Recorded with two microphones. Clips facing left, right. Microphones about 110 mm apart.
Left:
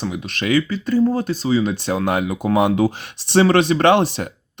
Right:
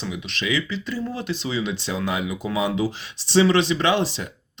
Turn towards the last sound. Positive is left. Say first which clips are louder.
# left 7 dB
turn(degrees=55)  # may be behind; listen again after turning